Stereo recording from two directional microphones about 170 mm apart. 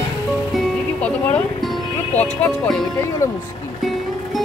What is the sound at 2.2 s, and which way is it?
Speech, 5° left (ahead or behind).